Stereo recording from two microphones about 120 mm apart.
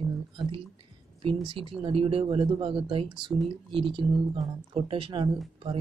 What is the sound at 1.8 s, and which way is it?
Speech, 50° right (ahead or behind).